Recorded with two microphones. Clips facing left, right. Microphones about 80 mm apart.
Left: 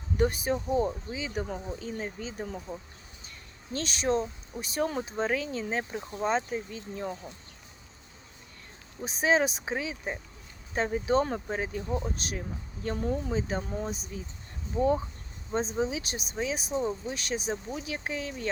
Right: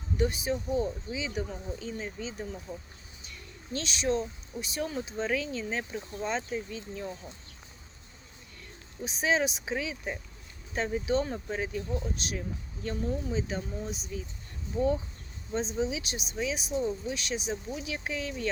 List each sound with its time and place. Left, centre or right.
0.2 s speech: left
9.0 s speech: left